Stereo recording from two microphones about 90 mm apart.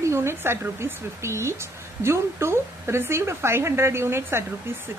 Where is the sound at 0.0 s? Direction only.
30° right (ahead or behind).